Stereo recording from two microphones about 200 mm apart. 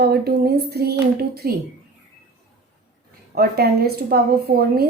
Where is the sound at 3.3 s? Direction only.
50° right (ahead or behind).